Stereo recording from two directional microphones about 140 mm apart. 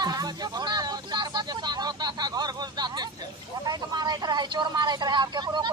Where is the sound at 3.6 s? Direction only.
30° right (ahead or behind).